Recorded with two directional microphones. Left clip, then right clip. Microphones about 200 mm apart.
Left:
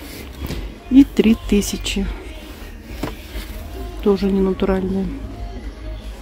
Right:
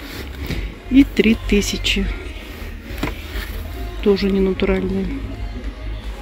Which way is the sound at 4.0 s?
10° left (ahead or behind).